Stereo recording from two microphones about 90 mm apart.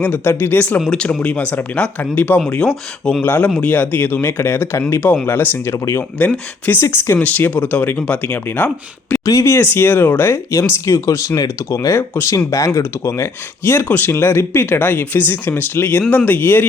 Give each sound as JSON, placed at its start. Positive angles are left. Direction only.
{"t": 0.0, "sound": "speech", "side_deg": 25}
{"t": 0.9, "sound": "speech", "side_deg": 10}
{"t": 2.6, "sound": "speech", "side_deg": 10}
{"t": 7.2, "sound": "speech", "side_deg": 20}
{"t": 9.2, "sound": "speech", "side_deg": 35}
{"t": 13.7, "sound": "speech", "side_deg": 20}